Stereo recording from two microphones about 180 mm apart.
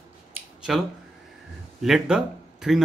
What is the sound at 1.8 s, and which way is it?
Speech, 5° right (ahead or behind).